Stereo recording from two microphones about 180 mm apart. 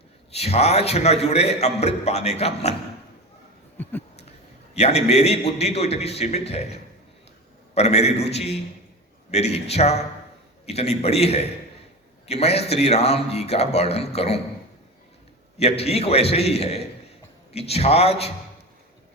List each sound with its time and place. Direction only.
0.3 s a man's voice: 35° left (ahead or behind)
3.8 s a sound: 10° left (ahead or behind)
4.7 s a man's voice: 35° left (ahead or behind)
15.5 s a man's voice: 35° left (ahead or behind)